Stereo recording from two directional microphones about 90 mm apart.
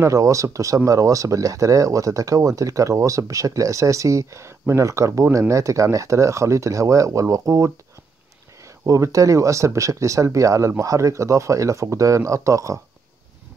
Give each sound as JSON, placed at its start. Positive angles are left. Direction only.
{"t": 0.0, "sound": "speech", "side_deg": -35}